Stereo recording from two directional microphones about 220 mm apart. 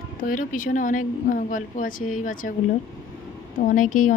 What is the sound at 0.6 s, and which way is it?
A woman's voice, 35° left (ahead or behind).